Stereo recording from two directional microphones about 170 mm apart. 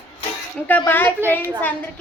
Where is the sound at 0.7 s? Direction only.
10° left (ahead or behind).